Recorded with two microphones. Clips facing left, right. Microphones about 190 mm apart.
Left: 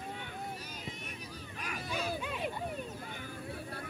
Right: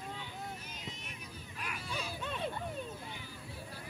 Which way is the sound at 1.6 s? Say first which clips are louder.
Left 4 dB; 45° left (ahead or behind).